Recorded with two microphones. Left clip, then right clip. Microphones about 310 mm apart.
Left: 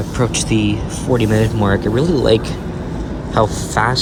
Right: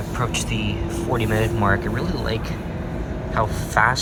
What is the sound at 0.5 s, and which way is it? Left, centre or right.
Speech, left.